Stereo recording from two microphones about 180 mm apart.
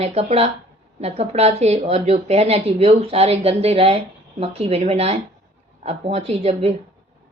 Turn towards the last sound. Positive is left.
turn(degrees=-35)  # may be behind; listen again after turning